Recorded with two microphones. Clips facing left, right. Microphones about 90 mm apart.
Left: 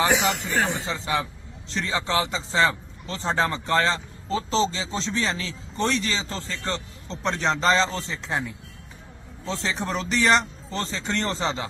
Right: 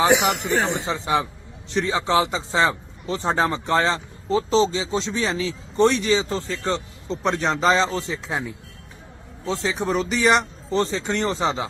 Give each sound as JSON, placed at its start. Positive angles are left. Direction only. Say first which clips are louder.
{"t": 0.0, "sound": "a man's voice", "louder": "right 4 dB", "side_deg": -20}
{"t": 9.5, "sound": "speech", "louder": "right 4 dB", "side_deg": -10}